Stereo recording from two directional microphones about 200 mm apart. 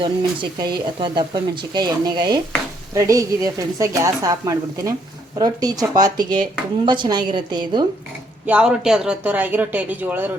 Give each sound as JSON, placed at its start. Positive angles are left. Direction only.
{"t": 0.0, "sound": "speech", "side_deg": -25}
{"t": 8.4, "sound": "speech", "side_deg": -5}